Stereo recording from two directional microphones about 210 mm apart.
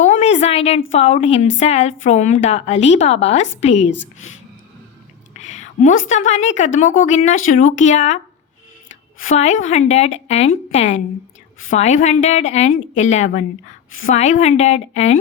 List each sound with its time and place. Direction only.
0.0 s a sound: 35° left (ahead or behind)
0.9 s a woman's voice: 30° left (ahead or behind)
5.4 s a woman's voice: 35° left (ahead or behind)
9.2 s a woman's voice: 35° left (ahead or behind)